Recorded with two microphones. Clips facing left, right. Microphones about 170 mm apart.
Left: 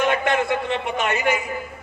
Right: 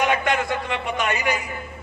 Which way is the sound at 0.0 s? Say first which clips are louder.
Left 1 dB; 15° right (ahead or behind).